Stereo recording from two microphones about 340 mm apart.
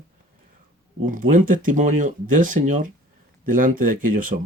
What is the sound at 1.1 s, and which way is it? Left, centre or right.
Speech, right.